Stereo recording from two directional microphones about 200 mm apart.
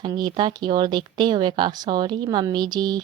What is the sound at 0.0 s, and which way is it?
Speech, 20° right (ahead or behind).